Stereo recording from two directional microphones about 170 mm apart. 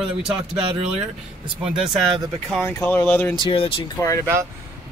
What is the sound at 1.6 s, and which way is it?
Speech, 5° right (ahead or behind).